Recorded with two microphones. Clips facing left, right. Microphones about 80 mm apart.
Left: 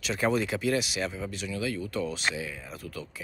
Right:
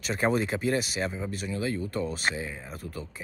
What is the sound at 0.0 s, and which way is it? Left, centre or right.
Speech, right.